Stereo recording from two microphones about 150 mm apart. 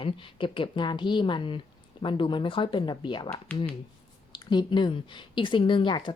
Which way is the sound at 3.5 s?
10° left (ahead or behind).